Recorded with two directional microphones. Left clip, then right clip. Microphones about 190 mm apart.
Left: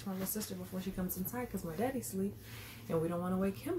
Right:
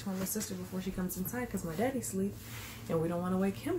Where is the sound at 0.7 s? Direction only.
20° left (ahead or behind).